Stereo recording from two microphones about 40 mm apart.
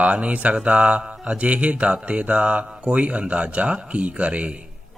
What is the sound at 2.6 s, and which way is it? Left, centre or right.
A man's voice, right.